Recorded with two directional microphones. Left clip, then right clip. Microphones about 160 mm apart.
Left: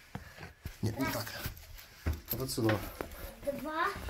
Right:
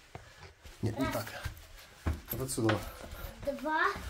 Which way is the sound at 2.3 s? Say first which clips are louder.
Even; 5° left (ahead or behind).